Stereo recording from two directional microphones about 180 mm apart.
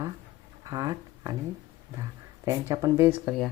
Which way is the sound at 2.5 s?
15° right (ahead or behind).